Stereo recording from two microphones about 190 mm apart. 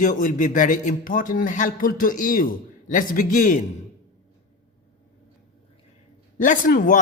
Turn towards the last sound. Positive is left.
turn(degrees=45)  # may be behind; listen again after turning